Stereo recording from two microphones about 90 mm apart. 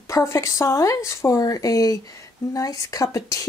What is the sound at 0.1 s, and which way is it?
Speech, 30° left (ahead or behind).